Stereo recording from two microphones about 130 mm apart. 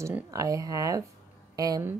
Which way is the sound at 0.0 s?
25° right (ahead or behind).